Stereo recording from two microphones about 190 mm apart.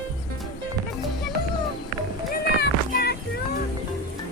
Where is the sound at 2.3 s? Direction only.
55° left (ahead or behind).